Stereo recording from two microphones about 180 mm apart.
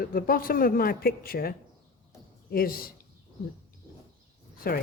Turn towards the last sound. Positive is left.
turn(degrees=55)  # may be behind; listen again after turning